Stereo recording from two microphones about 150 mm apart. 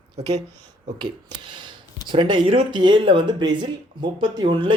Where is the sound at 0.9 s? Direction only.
30° right (ahead or behind).